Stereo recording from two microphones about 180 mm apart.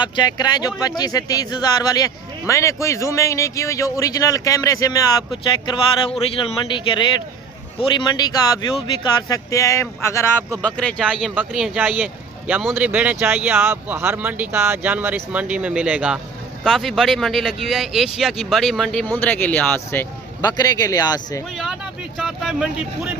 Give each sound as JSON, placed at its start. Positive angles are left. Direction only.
{"t": 0.0, "sound": "speech", "side_deg": 25}
{"t": 22.2, "sound": "speech", "side_deg": 0}